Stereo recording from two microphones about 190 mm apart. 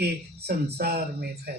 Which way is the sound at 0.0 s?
60° right (ahead or behind).